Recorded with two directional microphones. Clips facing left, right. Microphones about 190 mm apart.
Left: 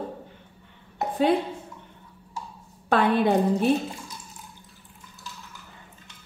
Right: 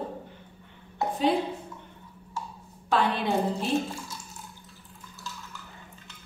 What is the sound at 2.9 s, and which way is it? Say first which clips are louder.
Speech: left 5 dB; 55° left (ahead or behind).